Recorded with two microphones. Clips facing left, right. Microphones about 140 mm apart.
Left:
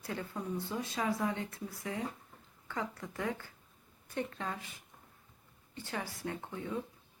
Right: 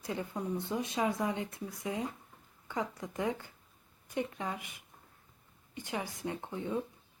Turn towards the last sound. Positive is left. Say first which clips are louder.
# right 3 dB
turn(degrees=-20)  # may be behind; listen again after turning